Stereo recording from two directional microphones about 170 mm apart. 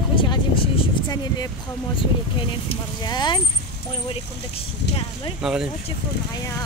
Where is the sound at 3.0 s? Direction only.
25° left (ahead or behind).